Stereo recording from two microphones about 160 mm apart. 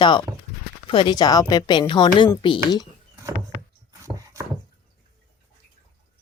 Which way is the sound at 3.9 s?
20° right (ahead or behind).